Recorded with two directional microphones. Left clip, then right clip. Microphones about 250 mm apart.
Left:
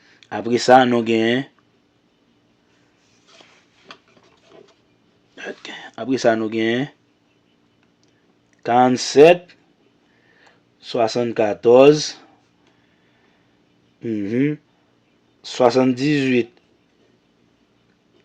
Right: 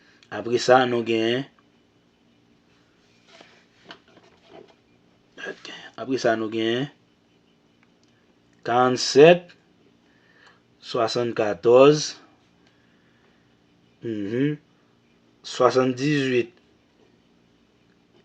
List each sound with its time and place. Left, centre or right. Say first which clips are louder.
0.0 s speech: left 5 dB; left
5.4 s speech: left 3 dB; left
8.6 s speech: left 4 dB; left
14.0 s speech: left 4 dB; left